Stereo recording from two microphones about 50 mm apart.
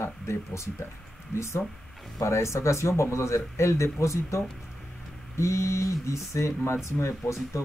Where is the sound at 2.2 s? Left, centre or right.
Left.